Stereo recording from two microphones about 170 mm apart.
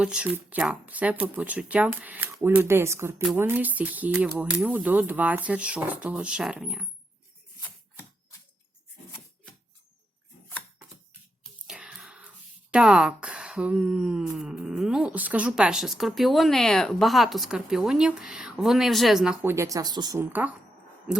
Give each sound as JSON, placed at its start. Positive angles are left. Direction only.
{"t": 0.0, "sound": "speech", "side_deg": -5}
{"t": 11.6, "sound": "a sound", "side_deg": -5}
{"t": 12.7, "sound": "speech", "side_deg": -5}